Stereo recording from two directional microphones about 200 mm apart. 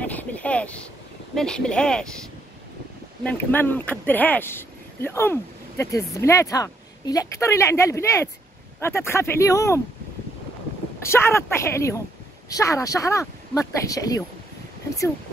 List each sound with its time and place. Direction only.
0.0 s a sound: 5° left (ahead or behind)
1.3 s speech: 5° left (ahead or behind)
3.3 s speech: 10° left (ahead or behind)
11.0 s speech: 15° left (ahead or behind)